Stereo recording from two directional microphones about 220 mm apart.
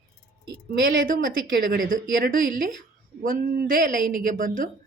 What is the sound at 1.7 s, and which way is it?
Speech, 40° right (ahead or behind).